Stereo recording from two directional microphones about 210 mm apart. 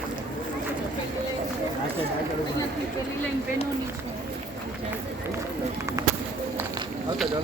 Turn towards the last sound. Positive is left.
turn(degrees=-15)  # may be behind; listen again after turning